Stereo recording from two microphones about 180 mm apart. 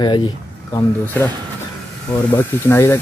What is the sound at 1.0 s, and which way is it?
Speech, 10° left (ahead or behind).